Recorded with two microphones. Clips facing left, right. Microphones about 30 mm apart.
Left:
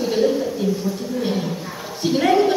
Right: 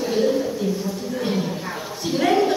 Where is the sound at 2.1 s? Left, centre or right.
Centre.